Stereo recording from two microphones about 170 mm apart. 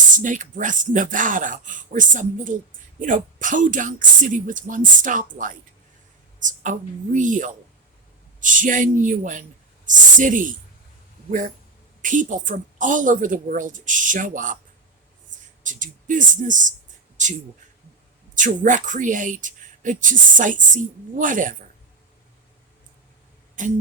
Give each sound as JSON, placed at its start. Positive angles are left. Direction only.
{"t": 0.2, "sound": "speech", "side_deg": -50}
{"t": 15.6, "sound": "speech", "side_deg": -50}
{"t": 18.3, "sound": "speech", "side_deg": -50}
{"t": 23.6, "sound": "speech", "side_deg": -50}